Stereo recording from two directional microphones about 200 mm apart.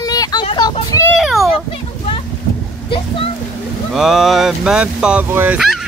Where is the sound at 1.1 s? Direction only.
Centre (ahead or behind).